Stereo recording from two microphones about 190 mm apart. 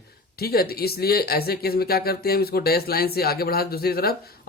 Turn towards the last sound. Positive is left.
turn(degrees=55)  # may be behind; listen again after turning